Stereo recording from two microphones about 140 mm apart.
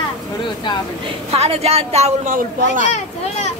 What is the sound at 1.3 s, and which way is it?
A woman's voice, 45° right (ahead or behind).